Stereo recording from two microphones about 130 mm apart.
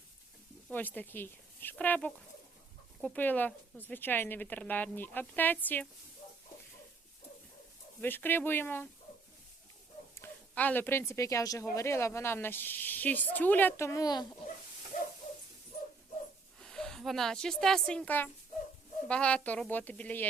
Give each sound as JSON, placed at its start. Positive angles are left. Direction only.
{"t": 0.7, "sound": "speech", "side_deg": 15}
{"t": 8.0, "sound": "speech", "side_deg": 15}
{"t": 10.2, "sound": "speech", "side_deg": 15}
{"t": 16.6, "sound": "a woman's voice", "side_deg": 5}